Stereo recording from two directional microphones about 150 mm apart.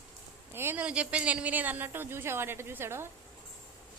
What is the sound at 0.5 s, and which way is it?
A woman's voice, 15° right (ahead or behind).